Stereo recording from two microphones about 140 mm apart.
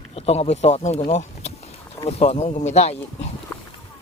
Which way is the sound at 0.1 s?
45° left (ahead or behind).